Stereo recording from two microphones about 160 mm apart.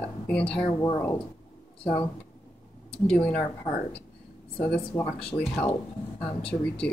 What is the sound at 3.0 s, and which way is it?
Speech, 5° left (ahead or behind).